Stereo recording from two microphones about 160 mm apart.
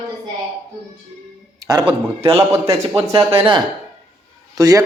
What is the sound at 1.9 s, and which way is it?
A man's voice, 35° right (ahead or behind).